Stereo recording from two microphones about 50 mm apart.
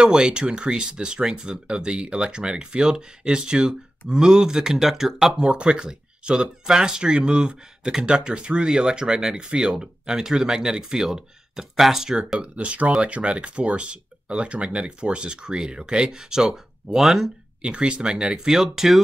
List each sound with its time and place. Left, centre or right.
0.0 s speech: centre
5.3 s speech: right
12.4 s speech: right; by 17.3 s centre
17.6 s speech: right